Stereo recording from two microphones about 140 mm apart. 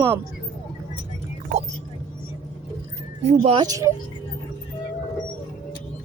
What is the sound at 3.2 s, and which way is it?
Speech, 55° right (ahead or behind).